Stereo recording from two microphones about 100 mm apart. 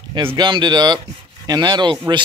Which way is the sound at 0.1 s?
55° right (ahead or behind).